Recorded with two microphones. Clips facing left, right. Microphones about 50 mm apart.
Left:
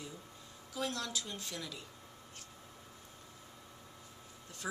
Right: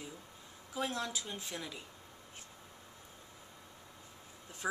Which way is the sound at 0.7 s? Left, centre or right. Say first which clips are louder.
Right 1 dB; centre.